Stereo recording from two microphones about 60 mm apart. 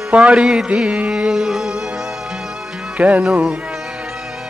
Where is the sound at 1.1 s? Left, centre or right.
Centre.